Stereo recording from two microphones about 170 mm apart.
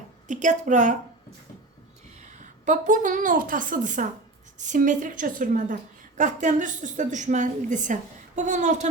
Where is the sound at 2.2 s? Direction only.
45° right (ahead or behind).